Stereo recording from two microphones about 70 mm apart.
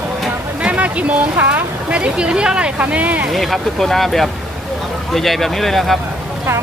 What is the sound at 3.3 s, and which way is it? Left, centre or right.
Speech, centre.